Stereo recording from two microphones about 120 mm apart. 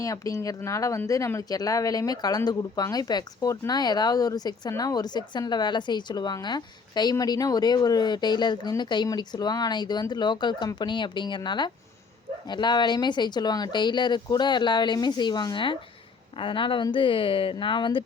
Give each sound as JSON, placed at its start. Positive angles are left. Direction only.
{"t": 0.0, "sound": "a woman's voice", "side_deg": 30}